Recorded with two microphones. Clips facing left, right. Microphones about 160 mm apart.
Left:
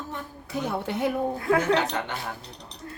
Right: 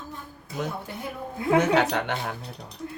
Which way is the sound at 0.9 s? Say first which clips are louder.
Left 9 dB; 85° left.